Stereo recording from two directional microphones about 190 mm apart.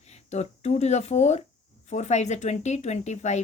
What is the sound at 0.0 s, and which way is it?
A woman's voice, 35° left (ahead or behind).